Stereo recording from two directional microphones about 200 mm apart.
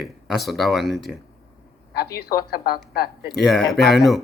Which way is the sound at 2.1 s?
50° left (ahead or behind).